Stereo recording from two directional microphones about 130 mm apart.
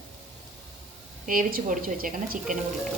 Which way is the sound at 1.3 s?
90° right.